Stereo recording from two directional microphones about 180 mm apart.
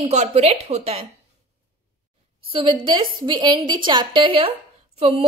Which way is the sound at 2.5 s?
30° right (ahead or behind).